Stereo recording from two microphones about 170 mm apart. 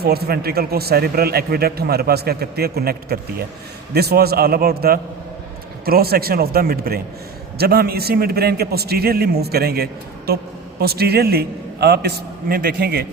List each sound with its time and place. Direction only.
0.0 s speech: 65° right (ahead or behind)